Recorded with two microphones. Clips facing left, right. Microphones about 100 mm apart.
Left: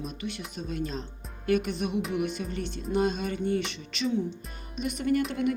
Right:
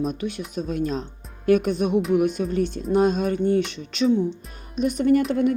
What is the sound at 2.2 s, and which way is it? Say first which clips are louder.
Speech: right 10 dB; 45° right (ahead or behind).